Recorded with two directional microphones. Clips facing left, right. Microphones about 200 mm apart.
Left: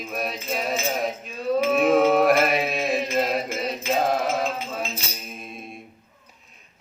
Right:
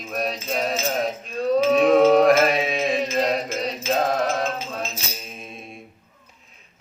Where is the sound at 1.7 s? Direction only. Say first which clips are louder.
Right 3 dB; 5° left (ahead or behind).